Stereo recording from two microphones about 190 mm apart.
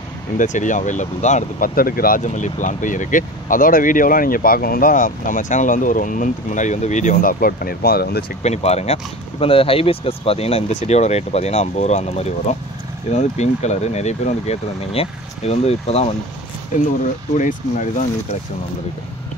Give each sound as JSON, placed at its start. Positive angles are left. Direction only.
{"t": 0.4, "sound": "speech", "side_deg": 40}
{"t": 8.4, "sound": "speech", "side_deg": 35}
{"t": 17.4, "sound": "speech", "side_deg": 45}